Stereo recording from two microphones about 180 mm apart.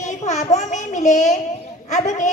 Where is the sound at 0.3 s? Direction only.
40° left (ahead or behind).